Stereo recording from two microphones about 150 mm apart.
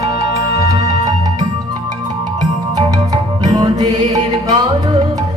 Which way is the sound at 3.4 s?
25° right (ahead or behind).